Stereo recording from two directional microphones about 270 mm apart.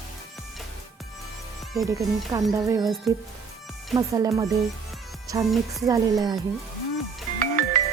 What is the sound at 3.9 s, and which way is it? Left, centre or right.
A woman's voice, centre.